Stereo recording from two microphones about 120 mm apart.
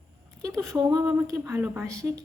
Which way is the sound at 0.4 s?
25° right (ahead or behind).